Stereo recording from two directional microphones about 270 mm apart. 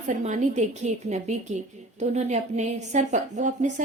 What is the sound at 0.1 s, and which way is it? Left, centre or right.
A woman's voice, right.